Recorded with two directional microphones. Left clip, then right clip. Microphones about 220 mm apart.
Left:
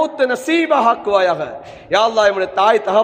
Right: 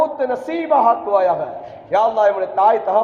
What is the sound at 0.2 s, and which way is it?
A man's voice, 55° left (ahead or behind).